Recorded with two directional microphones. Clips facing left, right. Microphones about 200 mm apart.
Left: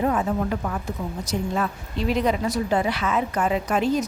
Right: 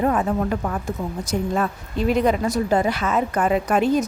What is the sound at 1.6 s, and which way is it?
A woman's voice, 50° right (ahead or behind).